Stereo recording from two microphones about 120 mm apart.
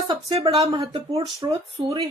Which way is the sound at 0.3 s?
55° right (ahead or behind).